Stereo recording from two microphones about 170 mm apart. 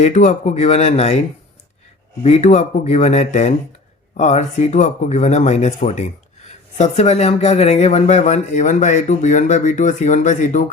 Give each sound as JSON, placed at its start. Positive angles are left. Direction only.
{"t": 0.0, "sound": "speech", "side_deg": 45}
{"t": 2.2, "sound": "speech", "side_deg": 40}